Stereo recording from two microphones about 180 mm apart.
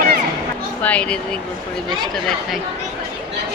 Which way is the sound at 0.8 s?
5° left (ahead or behind).